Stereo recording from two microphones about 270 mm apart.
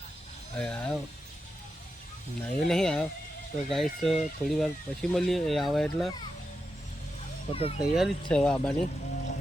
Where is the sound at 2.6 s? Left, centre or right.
Centre.